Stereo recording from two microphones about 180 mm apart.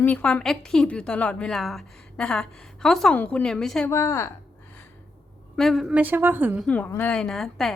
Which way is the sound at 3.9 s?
15° left (ahead or behind).